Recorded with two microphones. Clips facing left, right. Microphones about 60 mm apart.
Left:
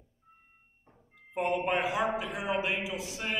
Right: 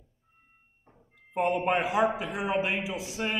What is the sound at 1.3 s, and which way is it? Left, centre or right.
A man's voice, right.